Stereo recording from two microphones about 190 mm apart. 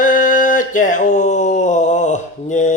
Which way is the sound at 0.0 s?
45° left (ahead or behind).